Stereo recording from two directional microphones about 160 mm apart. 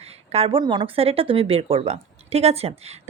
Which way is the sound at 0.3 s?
40° right (ahead or behind).